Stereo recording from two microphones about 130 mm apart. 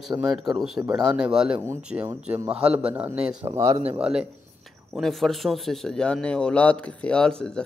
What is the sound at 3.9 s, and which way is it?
A man's voice, 5° right (ahead or behind).